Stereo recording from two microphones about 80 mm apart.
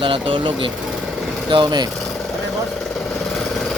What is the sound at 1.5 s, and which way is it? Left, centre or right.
Speech, right.